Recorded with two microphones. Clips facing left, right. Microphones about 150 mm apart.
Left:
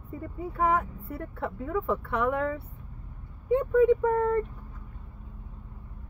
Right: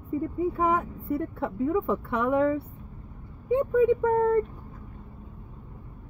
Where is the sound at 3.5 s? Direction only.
15° right (ahead or behind).